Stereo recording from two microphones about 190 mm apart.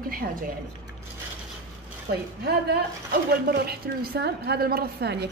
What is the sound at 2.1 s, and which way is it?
Speech, 55° right (ahead or behind).